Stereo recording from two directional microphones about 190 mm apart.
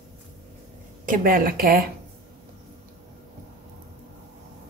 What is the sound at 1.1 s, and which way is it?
Speech, 50° right (ahead or behind).